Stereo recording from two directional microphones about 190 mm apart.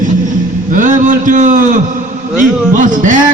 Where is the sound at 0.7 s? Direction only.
40° right (ahead or behind).